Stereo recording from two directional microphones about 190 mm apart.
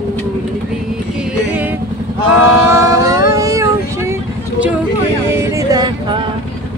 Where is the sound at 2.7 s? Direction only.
15° right (ahead or behind).